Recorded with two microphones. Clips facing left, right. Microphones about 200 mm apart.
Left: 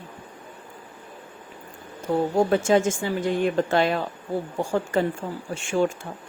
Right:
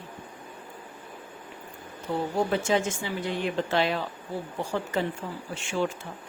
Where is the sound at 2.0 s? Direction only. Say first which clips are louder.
Left 6 dB; 45° left (ahead or behind).